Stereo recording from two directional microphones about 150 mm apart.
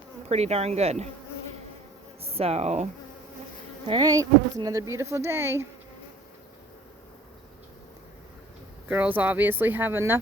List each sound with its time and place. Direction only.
0.3 s insect: 45° right (ahead or behind)
2.2 s insect: 40° right (ahead or behind)
3.8 s speech: 30° right (ahead or behind)
8.9 s speech: 10° right (ahead or behind)